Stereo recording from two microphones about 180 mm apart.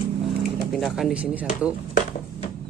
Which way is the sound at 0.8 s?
Centre (ahead or behind).